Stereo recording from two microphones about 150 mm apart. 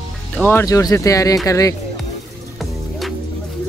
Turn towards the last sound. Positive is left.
turn(degrees=0)  # may be behind; listen again after turning